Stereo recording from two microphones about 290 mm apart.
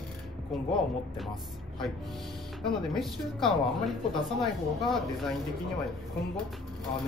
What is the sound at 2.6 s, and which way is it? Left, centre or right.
Speech, centre.